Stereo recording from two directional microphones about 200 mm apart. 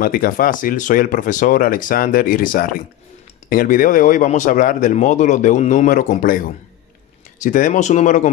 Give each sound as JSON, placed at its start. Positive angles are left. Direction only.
{"t": 0.0, "sound": "speech", "side_deg": 45}
{"t": 7.4, "sound": "speech", "side_deg": 40}